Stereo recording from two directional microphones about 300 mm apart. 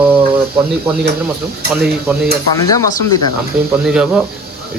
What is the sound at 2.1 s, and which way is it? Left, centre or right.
Speech, centre.